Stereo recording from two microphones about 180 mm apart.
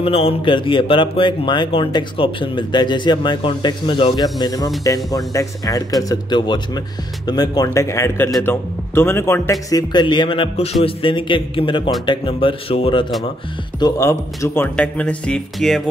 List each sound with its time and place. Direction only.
0.0 s speech: 35° left (ahead or behind)
13.7 s speech: 20° left (ahead or behind); by 15.8 s 5° left (ahead or behind)